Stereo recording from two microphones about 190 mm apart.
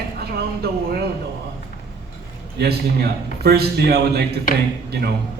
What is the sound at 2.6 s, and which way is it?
A man's voice, 55° right (ahead or behind).